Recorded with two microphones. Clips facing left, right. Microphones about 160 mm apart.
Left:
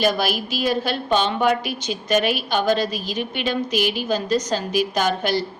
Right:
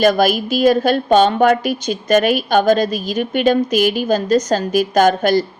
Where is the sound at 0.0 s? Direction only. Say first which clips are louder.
Right 7 dB; 50° right (ahead or behind).